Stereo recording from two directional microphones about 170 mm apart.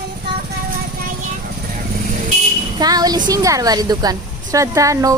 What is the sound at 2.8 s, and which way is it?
A woman's voice, 25° right (ahead or behind).